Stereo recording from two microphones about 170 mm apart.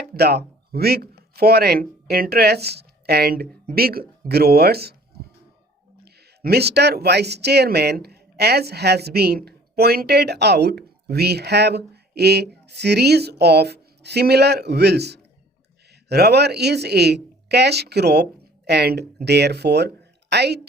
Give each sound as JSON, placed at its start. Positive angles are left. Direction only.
{"t": 0.1, "sound": "speech", "side_deg": -70}
{"t": 6.4, "sound": "speech", "side_deg": -70}